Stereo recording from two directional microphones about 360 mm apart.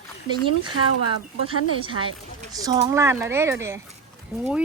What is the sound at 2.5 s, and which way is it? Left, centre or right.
Speech, centre.